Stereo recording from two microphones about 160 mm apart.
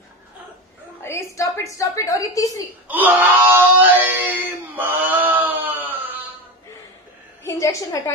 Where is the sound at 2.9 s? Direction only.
10° right (ahead or behind).